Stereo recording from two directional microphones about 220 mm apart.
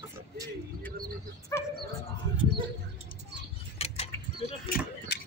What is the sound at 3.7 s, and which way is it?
Tick-tock, 30° left (ahead or behind).